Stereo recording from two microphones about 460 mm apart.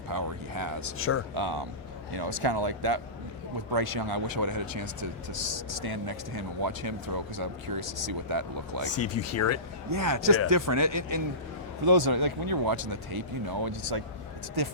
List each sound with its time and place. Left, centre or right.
0.1 s a sound: right
0.9 s speech: left
1.3 s speech: right
8.9 s speech: left
9.9 s speech: right